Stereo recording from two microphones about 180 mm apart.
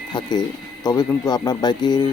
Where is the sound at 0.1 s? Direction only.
25° left (ahead or behind).